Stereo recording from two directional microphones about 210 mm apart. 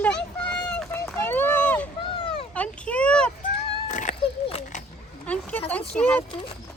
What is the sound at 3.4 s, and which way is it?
Cat, 35° left (ahead or behind).